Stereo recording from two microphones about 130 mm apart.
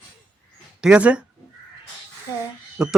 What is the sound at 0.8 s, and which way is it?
Speech, 10° right (ahead or behind).